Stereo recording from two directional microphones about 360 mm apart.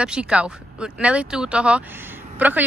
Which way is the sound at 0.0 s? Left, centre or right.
Centre.